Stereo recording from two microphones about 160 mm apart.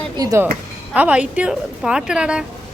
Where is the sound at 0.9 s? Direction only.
10° right (ahead or behind).